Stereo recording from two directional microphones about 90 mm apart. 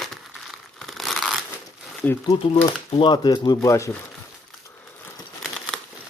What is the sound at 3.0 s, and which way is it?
Speech, 55° left (ahead or behind).